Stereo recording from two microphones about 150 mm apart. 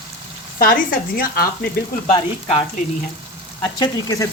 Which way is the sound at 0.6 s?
75° left (ahead or behind).